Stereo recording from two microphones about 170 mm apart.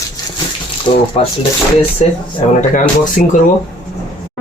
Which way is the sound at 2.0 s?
40° left (ahead or behind).